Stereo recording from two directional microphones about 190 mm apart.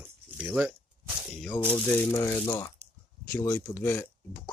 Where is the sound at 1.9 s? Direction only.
10° left (ahead or behind).